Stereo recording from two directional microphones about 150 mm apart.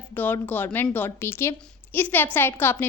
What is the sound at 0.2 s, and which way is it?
A woman's voice, 10° left (ahead or behind).